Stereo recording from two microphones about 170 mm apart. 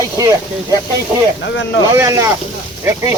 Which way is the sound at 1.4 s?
90° left.